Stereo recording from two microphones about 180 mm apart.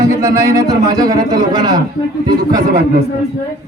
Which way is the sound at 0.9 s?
20° right (ahead or behind).